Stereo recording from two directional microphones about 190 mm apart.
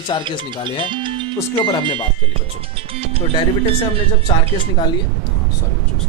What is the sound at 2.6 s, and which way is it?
Speech, 30° right (ahead or behind).